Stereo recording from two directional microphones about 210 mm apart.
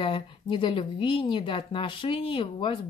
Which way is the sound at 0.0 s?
25° left (ahead or behind).